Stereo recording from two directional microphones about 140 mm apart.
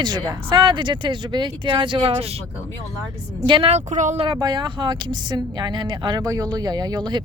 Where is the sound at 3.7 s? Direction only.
60° right (ahead or behind).